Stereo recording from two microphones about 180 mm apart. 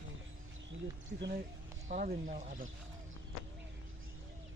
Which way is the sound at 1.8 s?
40° right (ahead or behind).